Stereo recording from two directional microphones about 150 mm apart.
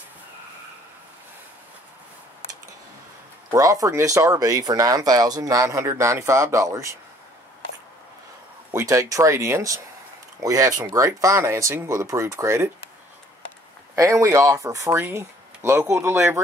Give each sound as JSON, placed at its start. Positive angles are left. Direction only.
{"t": 3.5, "sound": "speech", "side_deg": -20}
{"t": 8.7, "sound": "speech", "side_deg": -20}
{"t": 13.9, "sound": "speech", "side_deg": -20}